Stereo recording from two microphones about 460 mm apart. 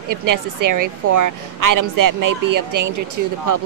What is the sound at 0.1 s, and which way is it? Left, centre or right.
Speech, right.